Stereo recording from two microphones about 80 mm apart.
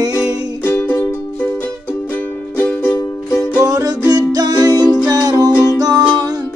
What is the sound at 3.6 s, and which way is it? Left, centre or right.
Music, right.